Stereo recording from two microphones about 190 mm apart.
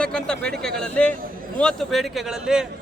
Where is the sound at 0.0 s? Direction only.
5° left (ahead or behind).